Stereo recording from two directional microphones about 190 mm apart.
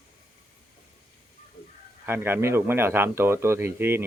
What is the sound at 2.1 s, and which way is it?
Speech, 10° right (ahead or behind).